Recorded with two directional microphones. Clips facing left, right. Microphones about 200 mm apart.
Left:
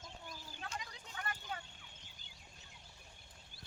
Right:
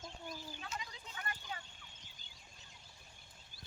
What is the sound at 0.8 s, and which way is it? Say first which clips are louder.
Vehicle: left 1 dB; 50° left (ahead or behind).